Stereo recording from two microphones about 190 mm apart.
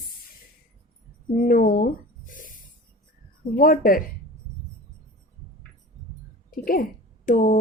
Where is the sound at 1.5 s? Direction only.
45° left (ahead or behind).